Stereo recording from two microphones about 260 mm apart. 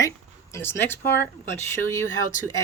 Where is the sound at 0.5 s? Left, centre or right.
Centre.